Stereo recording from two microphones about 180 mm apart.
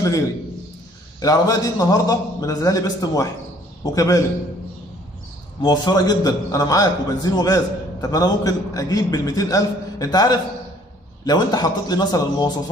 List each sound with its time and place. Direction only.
1.2 s a man's voice: 20° left (ahead or behind)
5.6 s a man's voice: 25° left (ahead or behind)